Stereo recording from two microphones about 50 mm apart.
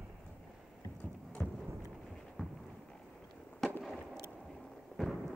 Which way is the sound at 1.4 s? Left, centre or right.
Left.